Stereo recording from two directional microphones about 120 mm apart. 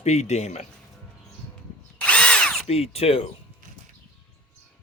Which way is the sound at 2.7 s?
55° left (ahead or behind).